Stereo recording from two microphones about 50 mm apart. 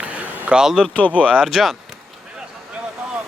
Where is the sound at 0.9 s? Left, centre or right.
Left.